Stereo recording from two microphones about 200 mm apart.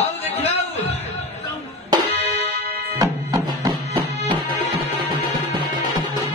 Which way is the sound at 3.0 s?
15° right (ahead or behind).